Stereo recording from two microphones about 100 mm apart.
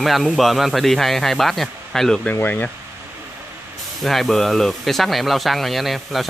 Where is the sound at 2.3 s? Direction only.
20° left (ahead or behind).